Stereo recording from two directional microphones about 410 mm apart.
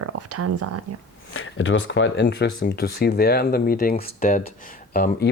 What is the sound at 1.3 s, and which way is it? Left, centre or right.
Speech, left.